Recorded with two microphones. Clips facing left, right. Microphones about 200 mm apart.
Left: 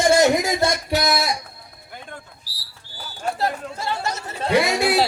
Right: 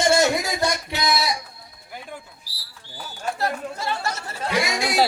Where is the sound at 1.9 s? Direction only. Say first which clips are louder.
Right 1 dB; 5° right (ahead or behind).